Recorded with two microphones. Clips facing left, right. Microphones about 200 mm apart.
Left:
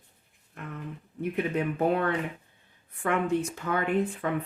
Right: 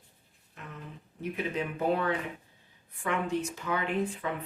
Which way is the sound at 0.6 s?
55° left (ahead or behind).